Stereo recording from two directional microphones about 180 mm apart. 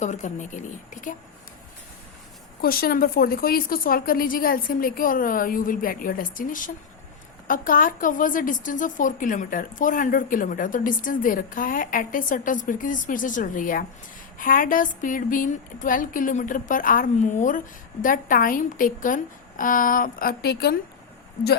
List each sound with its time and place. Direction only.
0.0 s a woman's voice: 40° left (ahead or behind)
2.6 s a woman's voice: 55° left (ahead or behind)